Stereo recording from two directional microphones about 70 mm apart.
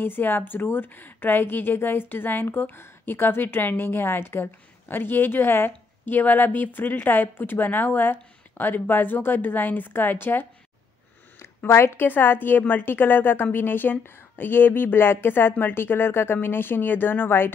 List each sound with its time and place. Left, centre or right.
0.0 s a woman's voice: left